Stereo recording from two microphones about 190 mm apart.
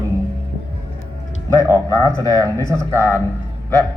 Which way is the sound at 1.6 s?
15° right (ahead or behind).